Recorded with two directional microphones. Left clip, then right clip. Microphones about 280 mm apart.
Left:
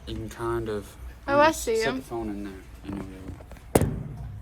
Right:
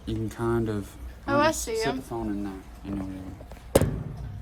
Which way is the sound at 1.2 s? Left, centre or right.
Centre.